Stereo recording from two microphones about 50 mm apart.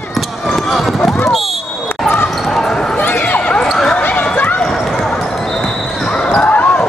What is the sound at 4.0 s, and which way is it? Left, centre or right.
Run, left.